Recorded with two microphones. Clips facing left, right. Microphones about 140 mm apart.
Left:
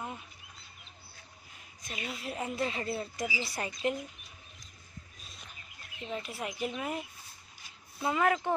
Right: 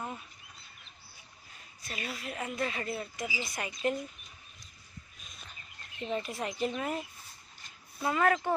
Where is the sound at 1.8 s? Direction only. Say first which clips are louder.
Even; 15° left (ahead or behind); by 3.7 s 35° left (ahead or behind).